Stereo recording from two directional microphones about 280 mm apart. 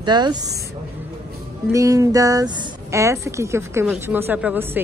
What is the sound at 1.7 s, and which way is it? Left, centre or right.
A woman's voice, centre.